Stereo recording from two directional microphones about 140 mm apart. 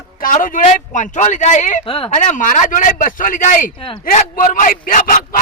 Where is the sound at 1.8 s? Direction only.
40° left (ahead or behind).